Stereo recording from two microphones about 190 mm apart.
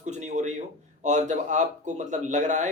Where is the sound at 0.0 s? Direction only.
40° right (ahead or behind).